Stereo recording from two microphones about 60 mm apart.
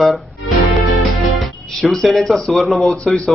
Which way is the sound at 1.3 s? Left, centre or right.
Centre.